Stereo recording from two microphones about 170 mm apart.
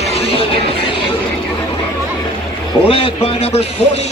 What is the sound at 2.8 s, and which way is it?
Speech, 35° left (ahead or behind).